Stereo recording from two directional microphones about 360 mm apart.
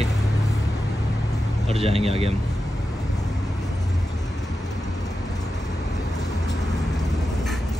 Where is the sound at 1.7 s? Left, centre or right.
Centre.